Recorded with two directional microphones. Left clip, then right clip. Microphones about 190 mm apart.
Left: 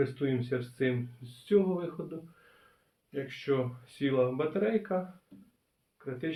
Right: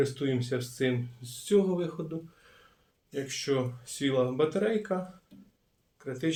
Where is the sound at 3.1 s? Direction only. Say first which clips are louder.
Right 1 dB; 60° right (ahead or behind).